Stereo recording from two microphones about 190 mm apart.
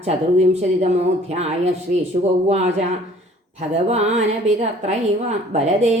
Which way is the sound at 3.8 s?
35° right (ahead or behind).